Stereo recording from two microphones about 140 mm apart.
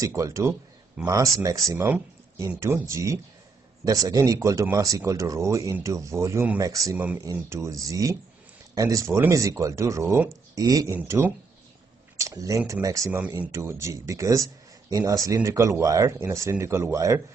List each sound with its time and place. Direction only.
0.0 s speech: 20° right (ahead or behind)
11.0 s speech: 15° right (ahead or behind)